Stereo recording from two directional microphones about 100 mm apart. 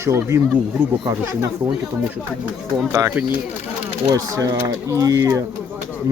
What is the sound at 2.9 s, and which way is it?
Speech, 35° right (ahead or behind).